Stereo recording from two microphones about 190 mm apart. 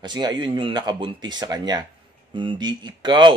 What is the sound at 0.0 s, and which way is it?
Speech, 20° right (ahead or behind).